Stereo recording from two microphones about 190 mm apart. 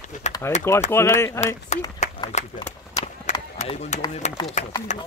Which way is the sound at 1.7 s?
35° left (ahead or behind).